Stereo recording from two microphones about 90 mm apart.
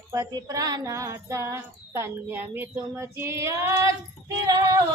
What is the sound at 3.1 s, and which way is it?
Speech, 30° right (ahead or behind).